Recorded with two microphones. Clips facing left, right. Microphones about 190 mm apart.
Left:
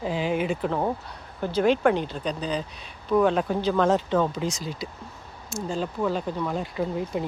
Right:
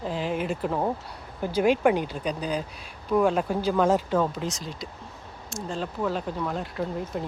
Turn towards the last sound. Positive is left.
turn(degrees=5)  # may be behind; listen again after turning